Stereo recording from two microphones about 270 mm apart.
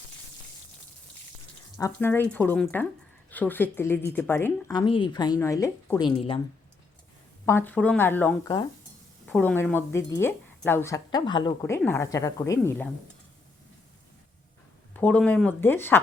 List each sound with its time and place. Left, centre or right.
1.8 s speech: centre
7.4 s speech: centre
14.9 s speech: centre